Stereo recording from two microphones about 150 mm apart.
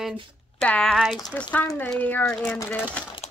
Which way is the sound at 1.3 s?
10° left (ahead or behind).